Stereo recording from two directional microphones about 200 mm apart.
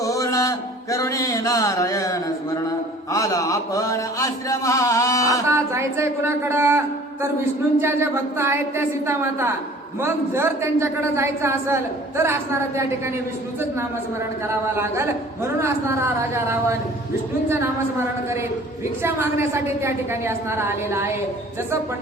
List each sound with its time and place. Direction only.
0.0 s a sound: 15° left (ahead or behind)
2.6 s mantra: 15° left (ahead or behind)
5.5 s a man's voice: 15° right (ahead or behind)
14.4 s a man's voice: 15° right (ahead or behind)